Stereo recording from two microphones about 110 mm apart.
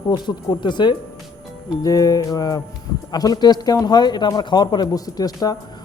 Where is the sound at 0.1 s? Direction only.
40° left (ahead or behind).